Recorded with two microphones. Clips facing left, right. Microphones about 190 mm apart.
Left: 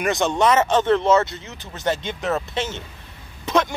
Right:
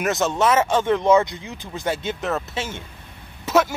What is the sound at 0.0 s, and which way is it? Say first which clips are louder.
Speech: left 1 dB; centre (ahead or behind).